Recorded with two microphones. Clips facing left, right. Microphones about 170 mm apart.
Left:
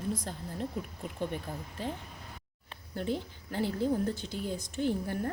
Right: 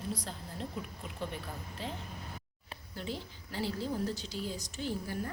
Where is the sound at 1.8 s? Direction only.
50° left (ahead or behind).